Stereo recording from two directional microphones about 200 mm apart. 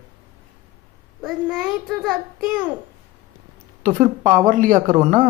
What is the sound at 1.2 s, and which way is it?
A child's voice, 5° right (ahead or behind).